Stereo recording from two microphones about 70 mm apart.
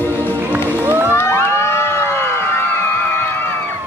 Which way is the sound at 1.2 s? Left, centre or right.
Left.